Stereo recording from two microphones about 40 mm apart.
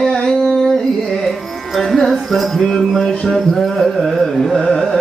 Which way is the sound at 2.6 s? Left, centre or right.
Centre.